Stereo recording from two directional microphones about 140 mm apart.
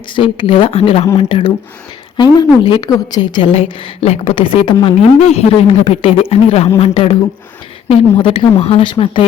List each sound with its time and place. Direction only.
0.2 s a woman's voice: 40° left (ahead or behind)
4.4 s a woman's voice: 35° left (ahead or behind)
5.3 s a woman's voice: 45° left (ahead or behind)